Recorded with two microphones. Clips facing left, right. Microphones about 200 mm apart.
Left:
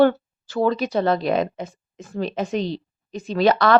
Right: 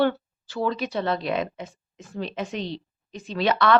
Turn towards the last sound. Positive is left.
turn(degrees=40)  # may be behind; listen again after turning